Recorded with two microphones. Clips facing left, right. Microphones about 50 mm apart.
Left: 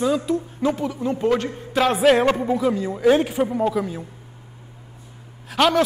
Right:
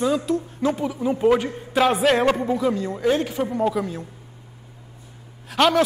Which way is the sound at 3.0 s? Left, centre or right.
Centre.